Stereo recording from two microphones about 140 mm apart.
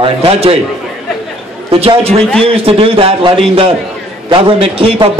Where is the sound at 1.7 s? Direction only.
45° right (ahead or behind).